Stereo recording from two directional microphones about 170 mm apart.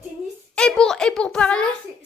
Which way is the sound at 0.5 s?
5° left (ahead or behind).